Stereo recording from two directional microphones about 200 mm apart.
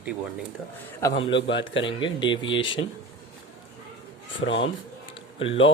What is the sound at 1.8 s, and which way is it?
Speech, 25° left (ahead or behind).